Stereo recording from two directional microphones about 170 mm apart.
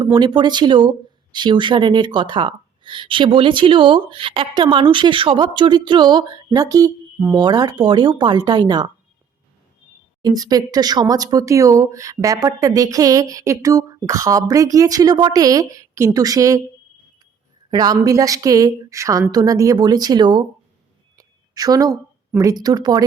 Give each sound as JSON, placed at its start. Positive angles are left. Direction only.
{"t": 0.0, "sound": "speech", "side_deg": -25}
{"t": 10.2, "sound": "speech", "side_deg": -20}
{"t": 17.7, "sound": "speech", "side_deg": -20}
{"t": 21.2, "sound": "a sound", "side_deg": -20}
{"t": 22.3, "sound": "speech", "side_deg": -20}